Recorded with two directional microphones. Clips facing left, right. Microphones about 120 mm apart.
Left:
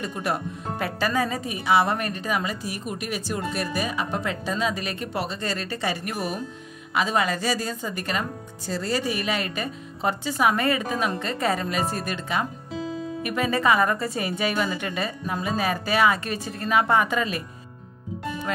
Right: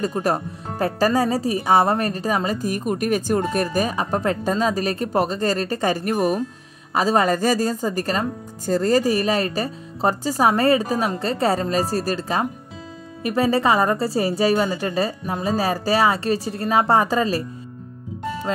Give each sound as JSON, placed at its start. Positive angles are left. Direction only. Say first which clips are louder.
{"t": 0.0, "sound": "speech", "louder": "right 6 dB", "side_deg": -40}